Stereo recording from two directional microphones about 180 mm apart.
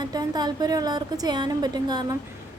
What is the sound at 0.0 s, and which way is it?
A woman's voice, 20° right (ahead or behind).